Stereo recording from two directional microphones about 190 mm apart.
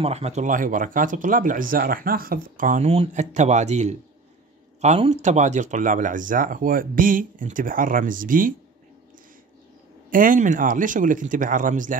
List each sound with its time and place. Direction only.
0.0 s speech: 35° right (ahead or behind)
10.1 s speech: 45° right (ahead or behind)